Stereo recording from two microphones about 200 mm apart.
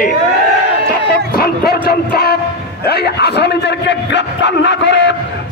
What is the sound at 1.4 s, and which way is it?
A man's voice, 50° left (ahead or behind).